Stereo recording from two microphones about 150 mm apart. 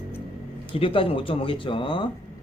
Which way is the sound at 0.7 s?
35° left (ahead or behind).